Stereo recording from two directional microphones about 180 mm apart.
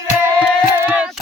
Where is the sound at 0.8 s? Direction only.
10° right (ahead or behind).